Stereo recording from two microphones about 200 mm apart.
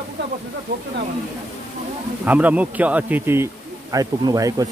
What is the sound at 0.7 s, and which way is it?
Speech, 60° right (ahead or behind).